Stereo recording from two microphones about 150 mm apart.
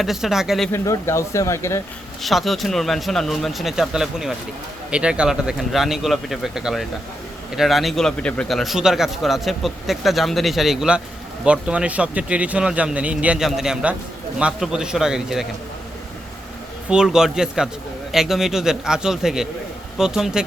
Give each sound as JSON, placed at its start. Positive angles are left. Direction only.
{"t": 0.0, "sound": "a man's voice", "side_deg": 0}
{"t": 0.7, "sound": "speech", "side_deg": 20}
{"t": 2.2, "sound": "a man's voice", "side_deg": 0}
{"t": 16.9, "sound": "a man's voice", "side_deg": -5}